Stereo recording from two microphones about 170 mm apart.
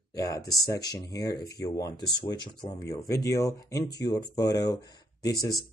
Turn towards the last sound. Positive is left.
turn(degrees=20)  # may be behind; listen again after turning